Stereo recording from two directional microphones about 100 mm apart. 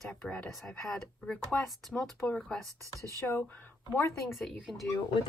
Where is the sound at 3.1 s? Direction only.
30° left (ahead or behind).